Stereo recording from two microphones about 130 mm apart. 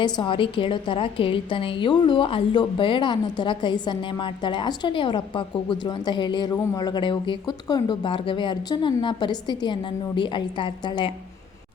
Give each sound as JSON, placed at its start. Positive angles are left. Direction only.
{"t": 0.0, "sound": "a woman's voice", "side_deg": 40}